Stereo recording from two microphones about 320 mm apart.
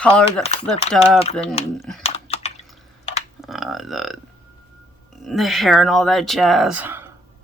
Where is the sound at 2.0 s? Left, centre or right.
Centre.